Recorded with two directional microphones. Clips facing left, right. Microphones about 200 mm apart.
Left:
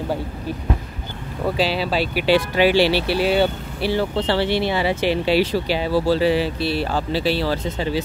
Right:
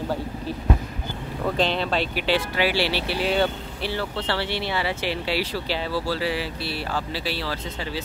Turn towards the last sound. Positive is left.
turn(degrees=25)  # may be behind; listen again after turning